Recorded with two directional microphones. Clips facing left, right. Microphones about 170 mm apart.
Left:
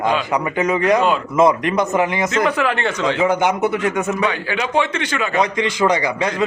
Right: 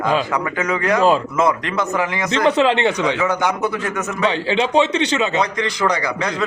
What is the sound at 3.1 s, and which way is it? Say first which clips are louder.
Speech: left 3 dB; 20° left (ahead or behind).